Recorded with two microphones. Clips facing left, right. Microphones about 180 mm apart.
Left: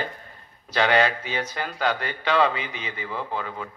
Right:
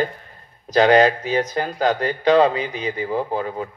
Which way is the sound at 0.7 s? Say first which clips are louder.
Right 7 dB; 40° right (ahead or behind).